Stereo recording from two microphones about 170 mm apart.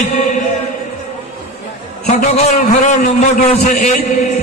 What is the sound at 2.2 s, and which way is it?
A man's voice, 40° left (ahead or behind).